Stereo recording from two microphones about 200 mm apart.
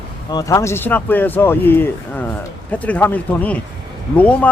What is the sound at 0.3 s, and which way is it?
Speech, 20° left (ahead or behind).